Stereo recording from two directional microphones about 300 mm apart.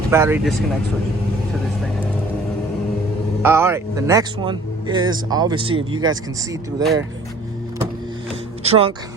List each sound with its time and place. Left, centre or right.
0.1 s speech: centre
3.4 s speech: centre
8.6 s speech: centre